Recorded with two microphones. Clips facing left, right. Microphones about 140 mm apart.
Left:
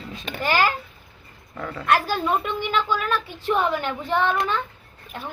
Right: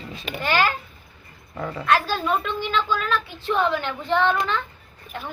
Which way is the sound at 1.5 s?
10° right (ahead or behind).